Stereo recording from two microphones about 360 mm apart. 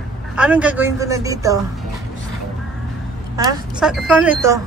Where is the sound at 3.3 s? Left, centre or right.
Centre.